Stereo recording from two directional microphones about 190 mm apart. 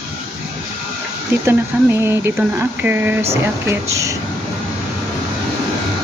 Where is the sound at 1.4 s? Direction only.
10° right (ahead or behind).